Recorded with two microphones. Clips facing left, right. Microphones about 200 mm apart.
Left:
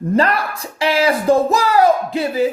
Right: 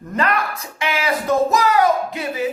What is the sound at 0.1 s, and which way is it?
A man's voice, 35° left (ahead or behind).